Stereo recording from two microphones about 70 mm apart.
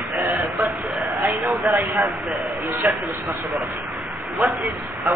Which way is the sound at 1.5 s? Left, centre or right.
Centre.